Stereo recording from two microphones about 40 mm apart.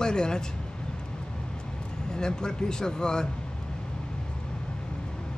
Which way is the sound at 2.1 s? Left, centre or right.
Centre.